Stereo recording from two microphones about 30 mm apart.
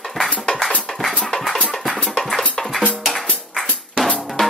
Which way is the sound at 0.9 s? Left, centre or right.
Centre.